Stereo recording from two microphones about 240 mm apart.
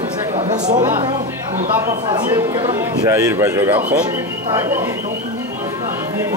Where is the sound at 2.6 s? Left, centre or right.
Centre.